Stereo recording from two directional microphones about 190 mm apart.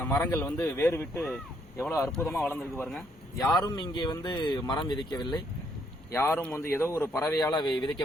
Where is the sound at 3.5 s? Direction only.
20° left (ahead or behind).